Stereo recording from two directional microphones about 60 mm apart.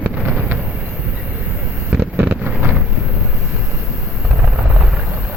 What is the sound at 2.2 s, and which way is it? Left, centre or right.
Vehicle, right.